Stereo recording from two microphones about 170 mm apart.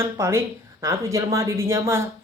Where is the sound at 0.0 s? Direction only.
15° right (ahead or behind).